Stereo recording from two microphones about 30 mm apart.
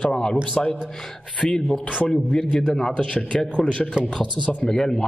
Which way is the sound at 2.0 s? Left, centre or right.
Left.